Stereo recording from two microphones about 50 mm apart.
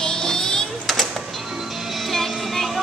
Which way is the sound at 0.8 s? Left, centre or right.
Centre.